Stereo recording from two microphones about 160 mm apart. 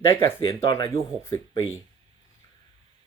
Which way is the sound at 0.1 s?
15° left (ahead or behind).